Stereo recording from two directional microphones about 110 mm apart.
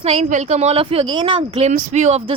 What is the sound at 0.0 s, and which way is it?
A woman's voice, 80° right.